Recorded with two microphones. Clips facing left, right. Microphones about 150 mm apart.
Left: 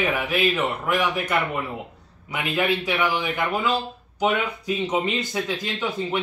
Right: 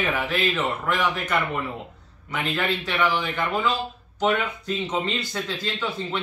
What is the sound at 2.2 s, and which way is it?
A man's voice, 10° left (ahead or behind).